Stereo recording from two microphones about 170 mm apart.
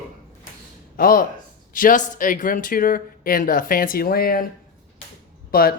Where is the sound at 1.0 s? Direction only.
55° left (ahead or behind).